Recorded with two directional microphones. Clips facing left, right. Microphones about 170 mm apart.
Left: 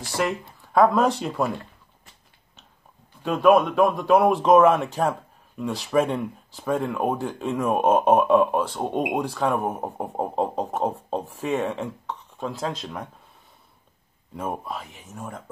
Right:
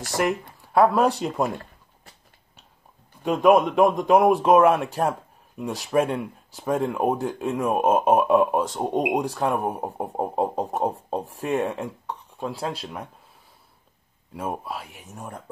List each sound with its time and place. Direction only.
0.2 s speech: 10° right (ahead or behind)
3.3 s speech: 20° right (ahead or behind)
14.3 s speech: 5° right (ahead or behind)